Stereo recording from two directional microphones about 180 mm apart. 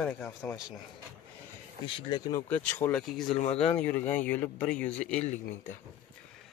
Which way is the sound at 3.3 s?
35° left (ahead or behind).